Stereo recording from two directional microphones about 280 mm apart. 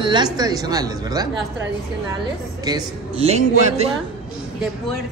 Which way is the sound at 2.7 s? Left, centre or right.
Centre.